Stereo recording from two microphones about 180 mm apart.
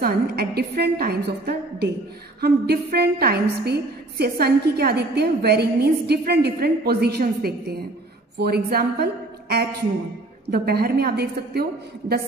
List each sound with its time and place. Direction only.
0.0 s a woman's voice: 60° right (ahead or behind)